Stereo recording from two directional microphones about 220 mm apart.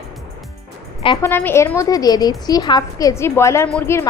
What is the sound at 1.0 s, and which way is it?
Speech, 20° left (ahead or behind).